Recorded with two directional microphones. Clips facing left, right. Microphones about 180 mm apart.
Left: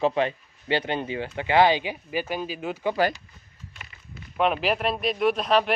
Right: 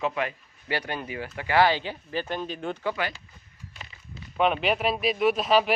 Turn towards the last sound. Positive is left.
turn(degrees=0)  # may be behind; listen again after turning